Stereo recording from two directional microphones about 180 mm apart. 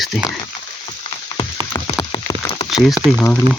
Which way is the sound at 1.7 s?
15° left (ahead or behind).